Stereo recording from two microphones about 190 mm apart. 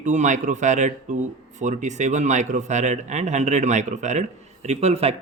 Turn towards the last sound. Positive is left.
turn(degrees=-35)  # may be behind; listen again after turning